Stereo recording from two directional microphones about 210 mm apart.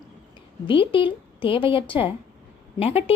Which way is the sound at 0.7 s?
25° left (ahead or behind).